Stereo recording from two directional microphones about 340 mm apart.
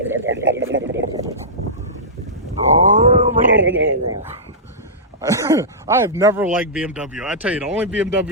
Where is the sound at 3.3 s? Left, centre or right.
Right.